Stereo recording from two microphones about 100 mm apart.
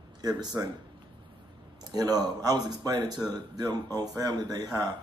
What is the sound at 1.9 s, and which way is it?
Speech, 40° right (ahead or behind).